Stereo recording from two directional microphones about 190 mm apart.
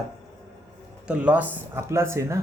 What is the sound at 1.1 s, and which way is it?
Speech, 5° right (ahead or behind).